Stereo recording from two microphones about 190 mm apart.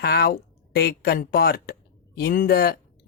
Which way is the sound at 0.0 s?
55° left (ahead or behind).